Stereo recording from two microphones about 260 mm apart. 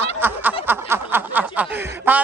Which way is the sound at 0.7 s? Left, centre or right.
Centre.